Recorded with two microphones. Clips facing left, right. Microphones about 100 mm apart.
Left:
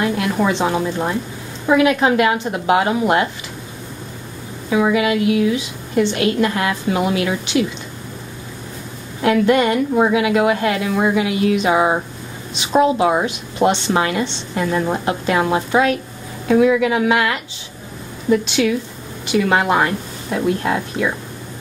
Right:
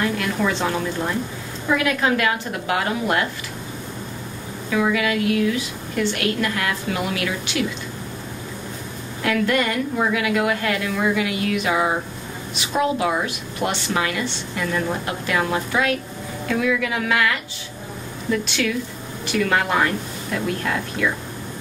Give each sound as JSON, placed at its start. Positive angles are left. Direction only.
{"t": 0.0, "sound": "a woman's voice", "side_deg": 20}
{"t": 4.6, "sound": "a woman's voice", "side_deg": 20}
{"t": 9.2, "sound": "a woman's voice", "side_deg": 25}